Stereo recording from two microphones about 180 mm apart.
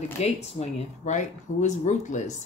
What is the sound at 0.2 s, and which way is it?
Speech, 40° left (ahead or behind).